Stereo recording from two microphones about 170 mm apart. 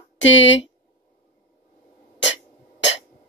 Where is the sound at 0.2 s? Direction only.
90° left.